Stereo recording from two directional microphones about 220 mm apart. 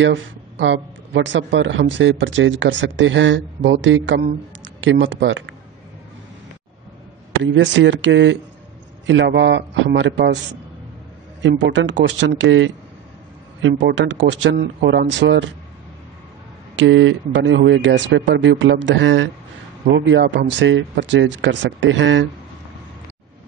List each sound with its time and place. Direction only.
0.0 s speech: 55° right (ahead or behind)
7.4 s a man's voice: 55° right (ahead or behind)
11.4 s speech: 55° right (ahead or behind)
16.7 s speech: 60° right (ahead or behind)